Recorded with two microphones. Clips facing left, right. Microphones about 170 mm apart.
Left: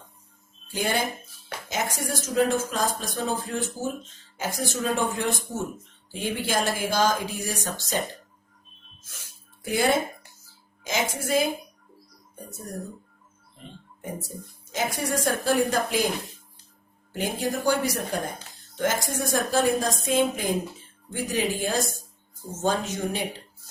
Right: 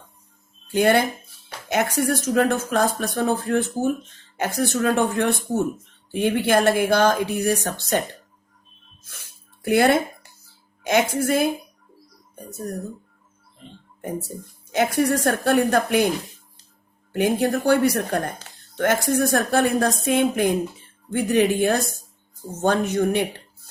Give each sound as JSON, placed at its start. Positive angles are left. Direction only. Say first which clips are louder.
{"t": 0.7, "sound": "speech", "louder": "right 9 dB", "side_deg": -65}
{"t": 9.6, "sound": "speech", "louder": "right 6 dB", "side_deg": -65}
{"t": 14.9, "sound": "speech", "louder": "right 5 dB", "side_deg": -60}
{"t": 17.1, "sound": "speech", "louder": "right 8 dB", "side_deg": -60}